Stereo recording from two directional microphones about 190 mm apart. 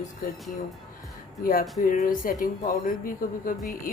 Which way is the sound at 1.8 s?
45° left (ahead or behind).